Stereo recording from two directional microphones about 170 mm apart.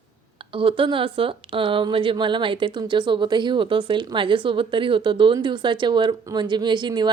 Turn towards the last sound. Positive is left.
turn(degrees=-25)  # may be behind; listen again after turning